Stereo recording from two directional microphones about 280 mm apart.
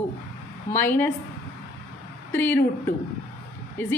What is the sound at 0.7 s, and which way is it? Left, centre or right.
Speech, centre.